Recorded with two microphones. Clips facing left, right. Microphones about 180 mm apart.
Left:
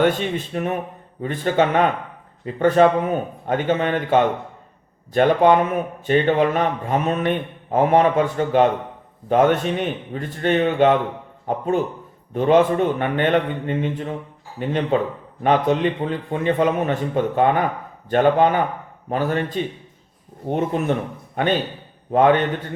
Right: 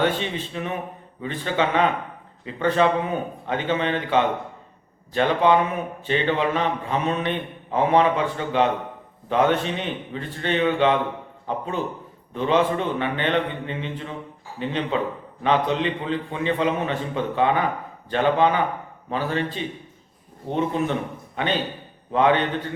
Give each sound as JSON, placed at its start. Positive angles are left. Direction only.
{"t": 0.0, "sound": "a man's voice", "side_deg": 45}
{"t": 22.1, "sound": "a man's voice", "side_deg": 50}